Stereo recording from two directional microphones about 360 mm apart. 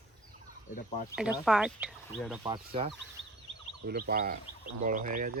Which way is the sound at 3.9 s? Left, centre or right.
Right.